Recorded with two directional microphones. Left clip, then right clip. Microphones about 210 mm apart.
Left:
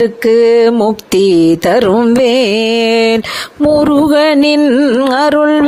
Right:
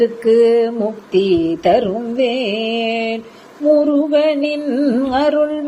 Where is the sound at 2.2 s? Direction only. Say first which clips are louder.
Left 7 dB; 55° left (ahead or behind).